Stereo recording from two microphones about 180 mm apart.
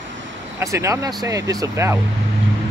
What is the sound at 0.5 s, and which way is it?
Speech, 15° right (ahead or behind).